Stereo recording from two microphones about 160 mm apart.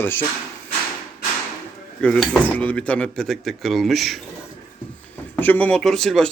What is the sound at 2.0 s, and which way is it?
Speech, 5° left (ahead or behind).